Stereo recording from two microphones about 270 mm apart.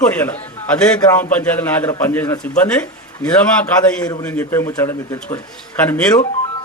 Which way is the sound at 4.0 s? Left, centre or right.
Centre.